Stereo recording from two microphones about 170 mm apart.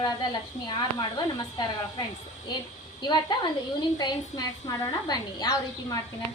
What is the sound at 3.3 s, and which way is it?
A woman's voice, 25° left (ahead or behind).